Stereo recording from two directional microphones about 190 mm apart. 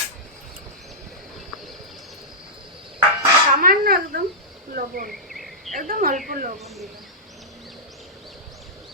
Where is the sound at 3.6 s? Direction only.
50° right (ahead or behind).